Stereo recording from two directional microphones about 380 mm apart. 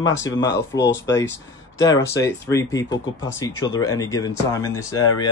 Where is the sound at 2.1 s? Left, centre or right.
Centre.